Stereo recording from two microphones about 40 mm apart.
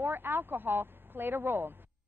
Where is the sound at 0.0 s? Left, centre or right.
Right.